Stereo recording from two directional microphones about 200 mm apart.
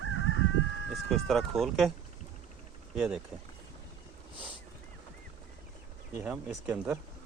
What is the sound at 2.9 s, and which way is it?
Speech, centre (ahead or behind).